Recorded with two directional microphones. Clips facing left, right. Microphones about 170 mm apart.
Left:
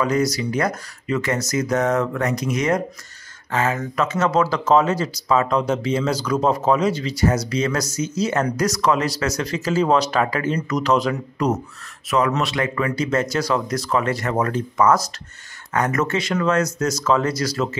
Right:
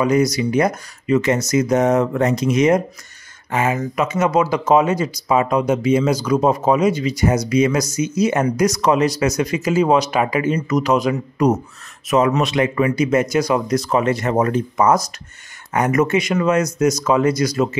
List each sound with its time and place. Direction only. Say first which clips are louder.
0.0 s speech: right 4 dB; 20° right (ahead or behind)